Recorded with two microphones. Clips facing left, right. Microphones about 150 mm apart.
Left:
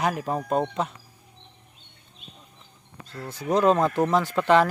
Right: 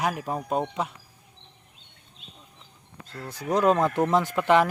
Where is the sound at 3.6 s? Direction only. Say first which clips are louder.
Left 1 dB; 20° left (ahead or behind).